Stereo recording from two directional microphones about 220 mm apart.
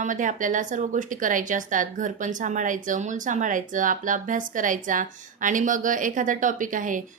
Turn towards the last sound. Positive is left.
turn(degrees=-35)  # may be behind; listen again after turning